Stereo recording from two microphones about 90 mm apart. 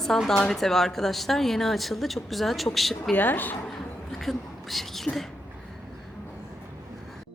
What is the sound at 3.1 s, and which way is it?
Speech, 20° left (ahead or behind).